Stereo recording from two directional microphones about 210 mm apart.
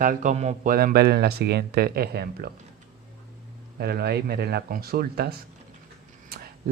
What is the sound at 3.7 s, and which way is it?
Speech, 50° right (ahead or behind).